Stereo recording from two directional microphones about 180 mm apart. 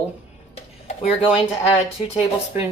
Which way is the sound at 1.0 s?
35° left (ahead or behind).